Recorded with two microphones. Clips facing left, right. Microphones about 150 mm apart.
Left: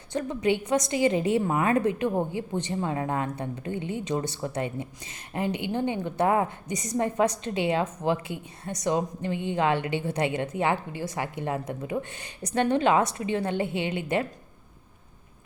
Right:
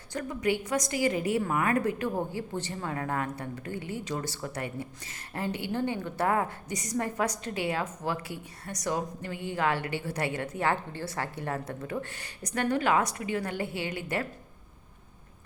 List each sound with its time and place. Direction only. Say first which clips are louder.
0.1 s a woman's voice: left 4 dB; 25° left (ahead or behind)